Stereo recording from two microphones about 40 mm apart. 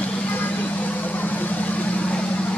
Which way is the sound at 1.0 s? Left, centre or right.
Left.